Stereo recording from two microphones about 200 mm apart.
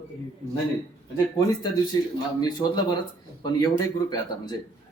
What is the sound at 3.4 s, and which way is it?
Speech, 20° left (ahead or behind).